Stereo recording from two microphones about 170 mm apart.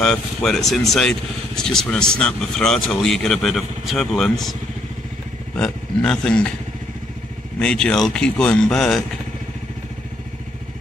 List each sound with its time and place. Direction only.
0.0 s speech: 5° left (ahead or behind)
5.6 s speech: 5° left (ahead or behind)
7.5 s speech: 5° left (ahead or behind)